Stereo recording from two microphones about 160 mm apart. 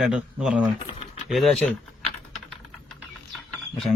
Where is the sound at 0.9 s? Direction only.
40° left (ahead or behind).